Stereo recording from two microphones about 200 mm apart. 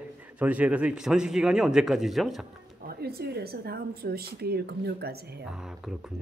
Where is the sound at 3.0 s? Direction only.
50° right (ahead or behind).